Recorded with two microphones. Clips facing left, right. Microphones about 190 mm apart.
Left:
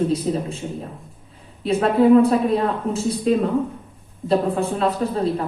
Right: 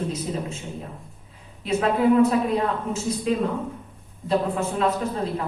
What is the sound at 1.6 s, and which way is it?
A woman's voice, 35° left (ahead or behind).